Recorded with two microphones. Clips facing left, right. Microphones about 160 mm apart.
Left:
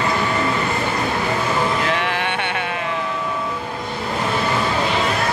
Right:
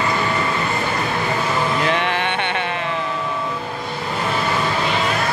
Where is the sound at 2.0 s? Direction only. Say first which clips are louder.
Right 1 dB; 5° left (ahead or behind).